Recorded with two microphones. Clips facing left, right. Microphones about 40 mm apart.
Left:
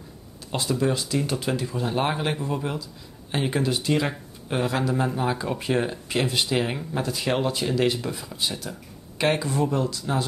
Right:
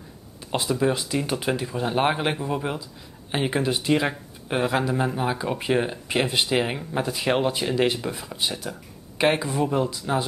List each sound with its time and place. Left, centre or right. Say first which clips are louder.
0.5 s speech: right 1 dB; centre